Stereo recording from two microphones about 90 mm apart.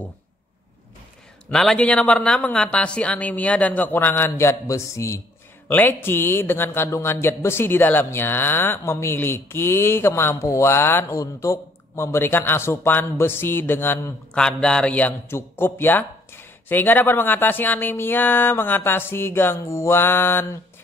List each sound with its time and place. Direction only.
1.5 s a woman's voice: 5° left (ahead or behind); by 5.2 s 35° left (ahead or behind)
5.7 s a man's voice: 20° left (ahead or behind)
14.3 s a woman's voice: 10° left (ahead or behind)
15.2 s a man's voice: 25° left (ahead or behind)